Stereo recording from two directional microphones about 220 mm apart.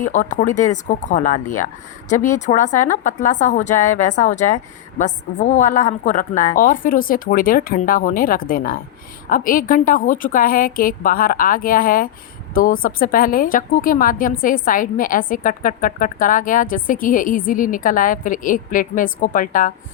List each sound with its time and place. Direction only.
0.0 s a woman's voice: 35° left (ahead or behind)